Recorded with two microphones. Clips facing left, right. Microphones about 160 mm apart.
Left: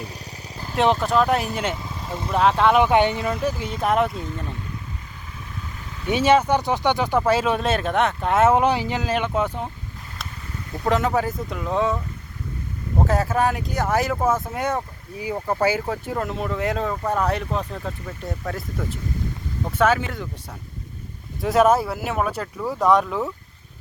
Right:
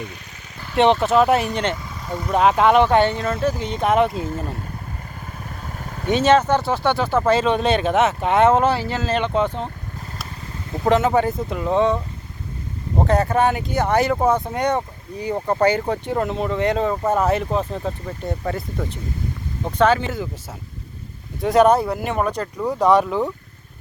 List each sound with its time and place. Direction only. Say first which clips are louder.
0.8 s speech: right 4 dB; centre (ahead or behind)
1.8 s vehicle: right 2 dB; 25° left (ahead or behind)
2.3 s speech: right 2 dB; 5° right (ahead or behind)
2.8 s speech: right 1 dB; 15° left (ahead or behind)
4.2 s speech: right 5 dB; 40° right (ahead or behind)
5.2 s vehicle: right 2 dB; 50° right (ahead or behind)
6.1 s speech: right 2 dB; 10° left (ahead or behind)
8.6 s speech: right 1 dB; 15° left (ahead or behind)
10.8 s speech: right 4 dB; centre (ahead or behind)
13.1 s speech: right 4 dB; centre (ahead or behind)
19.8 s speech: right 3 dB; 5° left (ahead or behind)
21.4 s speech: right 3 dB; centre (ahead or behind)